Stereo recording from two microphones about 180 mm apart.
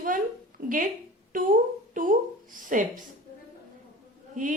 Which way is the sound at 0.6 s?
50° right (ahead or behind).